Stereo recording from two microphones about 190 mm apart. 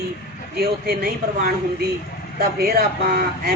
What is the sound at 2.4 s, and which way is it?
A man's voice, 55° right (ahead or behind).